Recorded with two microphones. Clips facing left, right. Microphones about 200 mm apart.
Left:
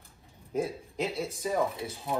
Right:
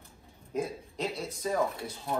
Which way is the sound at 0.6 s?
Centre (ahead or behind).